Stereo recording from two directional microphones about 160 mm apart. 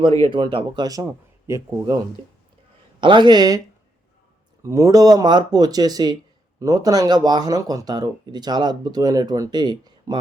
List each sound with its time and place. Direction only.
0.2 s speech: 30° right (ahead or behind)
3.0 s speech: 30° right (ahead or behind)
4.6 s speech: 20° right (ahead or behind)